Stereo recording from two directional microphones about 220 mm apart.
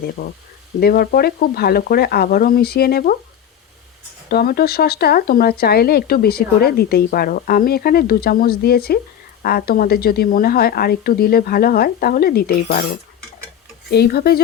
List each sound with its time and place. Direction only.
0.2 s speech: 45° left (ahead or behind)
4.3 s speech: 45° left (ahead or behind)